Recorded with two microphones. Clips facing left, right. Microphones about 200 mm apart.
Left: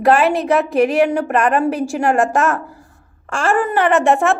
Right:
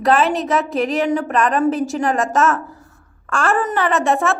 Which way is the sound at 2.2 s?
15° left (ahead or behind).